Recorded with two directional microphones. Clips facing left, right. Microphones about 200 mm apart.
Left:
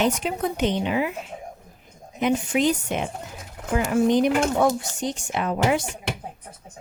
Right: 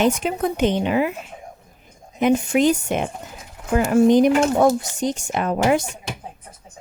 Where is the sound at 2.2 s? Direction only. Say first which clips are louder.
Right 4 dB; 50° right (ahead or behind).